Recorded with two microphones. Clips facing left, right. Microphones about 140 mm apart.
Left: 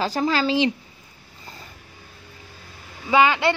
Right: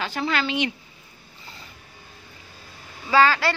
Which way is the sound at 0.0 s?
35° left (ahead or behind).